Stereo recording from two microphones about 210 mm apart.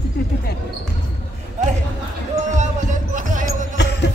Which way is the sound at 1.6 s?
35° right (ahead or behind).